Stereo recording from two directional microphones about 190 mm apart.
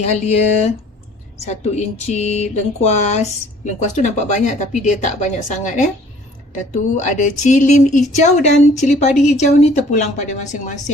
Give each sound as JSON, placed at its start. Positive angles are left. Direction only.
{"t": 0.0, "sound": "speech", "side_deg": 35}
{"t": 6.9, "sound": "speech", "side_deg": 40}